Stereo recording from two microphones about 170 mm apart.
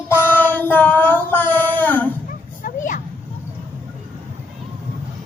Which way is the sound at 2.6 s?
50° left (ahead or behind).